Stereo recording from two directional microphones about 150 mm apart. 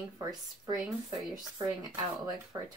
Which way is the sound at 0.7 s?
Centre (ahead or behind).